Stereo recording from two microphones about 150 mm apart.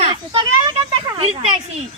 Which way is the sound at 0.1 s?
30° right (ahead or behind).